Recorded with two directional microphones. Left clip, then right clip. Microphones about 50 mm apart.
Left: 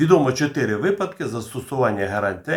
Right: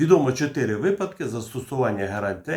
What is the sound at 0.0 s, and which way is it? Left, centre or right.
Speech, left.